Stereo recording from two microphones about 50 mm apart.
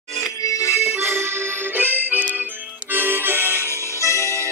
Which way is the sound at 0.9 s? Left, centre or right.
Right.